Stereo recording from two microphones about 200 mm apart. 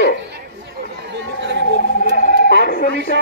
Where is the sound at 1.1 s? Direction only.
60° right (ahead or behind).